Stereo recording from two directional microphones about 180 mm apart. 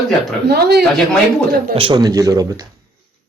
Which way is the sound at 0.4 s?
65° right (ahead or behind).